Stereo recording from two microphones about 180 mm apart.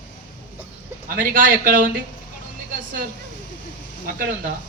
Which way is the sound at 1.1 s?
50° right (ahead or behind).